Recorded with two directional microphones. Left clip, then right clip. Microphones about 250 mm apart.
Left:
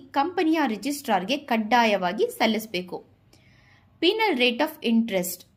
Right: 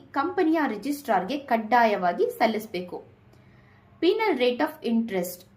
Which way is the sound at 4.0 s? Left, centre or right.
Left.